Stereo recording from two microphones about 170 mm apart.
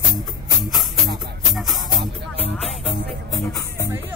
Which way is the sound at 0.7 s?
Centre (ahead or behind).